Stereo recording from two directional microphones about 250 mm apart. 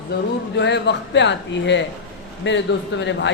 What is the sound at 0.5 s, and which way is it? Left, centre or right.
Speech, left.